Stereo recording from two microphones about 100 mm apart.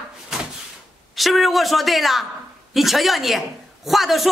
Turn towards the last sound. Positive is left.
turn(degrees=0)  # may be behind; listen again after turning